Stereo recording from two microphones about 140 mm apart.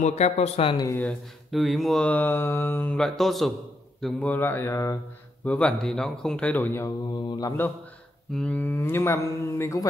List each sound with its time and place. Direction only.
0.0 s speech: 55° left (ahead or behind)
0.8 s speech: 15° left (ahead or behind)
1.5 s speech: centre (ahead or behind); by 4.9 s 20° left (ahead or behind)
5.4 s speech: 10° left (ahead or behind)
7.2 s mantra: 30° left (ahead or behind)
8.3 s speech: 5° left (ahead or behind)